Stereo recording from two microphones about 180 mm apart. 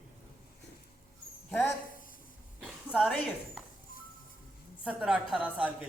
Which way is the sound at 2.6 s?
Centre (ahead or behind).